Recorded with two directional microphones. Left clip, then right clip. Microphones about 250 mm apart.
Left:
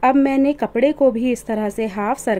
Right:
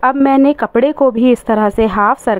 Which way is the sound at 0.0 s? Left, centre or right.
Centre.